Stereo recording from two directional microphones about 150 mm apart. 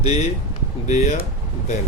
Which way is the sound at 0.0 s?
45° left (ahead or behind).